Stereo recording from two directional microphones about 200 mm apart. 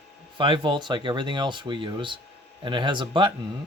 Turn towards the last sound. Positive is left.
turn(degrees=-25)  # may be behind; listen again after turning